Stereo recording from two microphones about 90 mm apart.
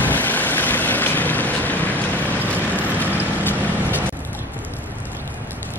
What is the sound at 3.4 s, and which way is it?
Vehicle, 20° left (ahead or behind).